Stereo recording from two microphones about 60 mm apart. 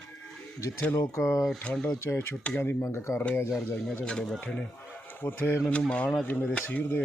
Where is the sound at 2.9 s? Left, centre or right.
Left.